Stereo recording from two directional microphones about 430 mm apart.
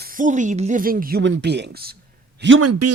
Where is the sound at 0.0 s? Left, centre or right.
Centre.